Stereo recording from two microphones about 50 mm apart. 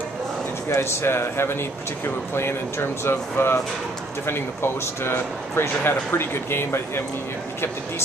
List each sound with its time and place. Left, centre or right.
0.7 s speech: left